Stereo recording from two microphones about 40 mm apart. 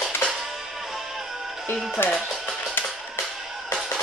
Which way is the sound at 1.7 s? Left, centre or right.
Left.